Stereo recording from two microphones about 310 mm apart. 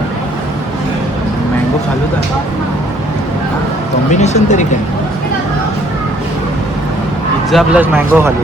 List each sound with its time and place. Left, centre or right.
4.1 s speech: left
7.5 s a man's voice: centre